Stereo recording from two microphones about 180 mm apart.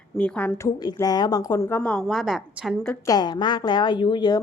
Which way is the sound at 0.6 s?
20° left (ahead or behind).